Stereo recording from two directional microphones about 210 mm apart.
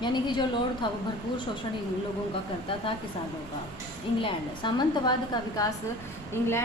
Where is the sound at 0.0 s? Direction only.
20° left (ahead or behind).